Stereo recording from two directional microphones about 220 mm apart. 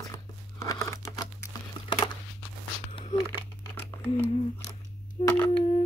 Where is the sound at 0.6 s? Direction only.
15° left (ahead or behind).